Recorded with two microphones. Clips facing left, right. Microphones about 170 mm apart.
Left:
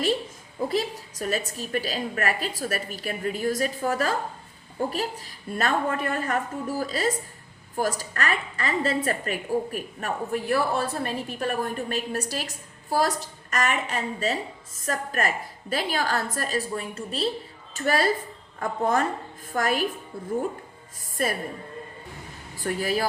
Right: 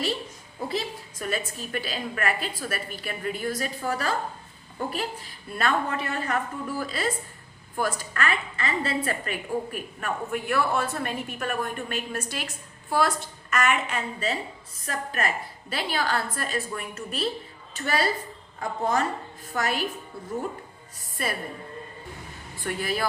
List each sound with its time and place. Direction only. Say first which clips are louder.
0.7 s a woman's voice: left 2 dB; 40° left (ahead or behind)
17.7 s a woman's voice: left 3 dB; 45° left (ahead or behind)
21.2 s a woman's voice: left 4 dB; 45° left (ahead or behind)
22.5 s a woman's voice: left 3 dB; 40° left (ahead or behind)